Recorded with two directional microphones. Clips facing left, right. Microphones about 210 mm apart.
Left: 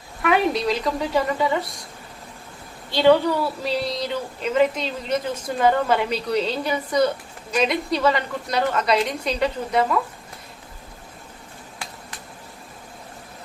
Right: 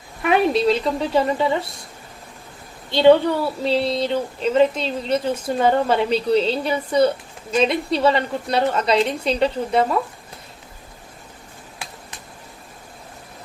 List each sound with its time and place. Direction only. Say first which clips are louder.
0.2 s speech: right 3 dB; 25° right (ahead or behind)
2.9 s speech: right 3 dB; 25° right (ahead or behind)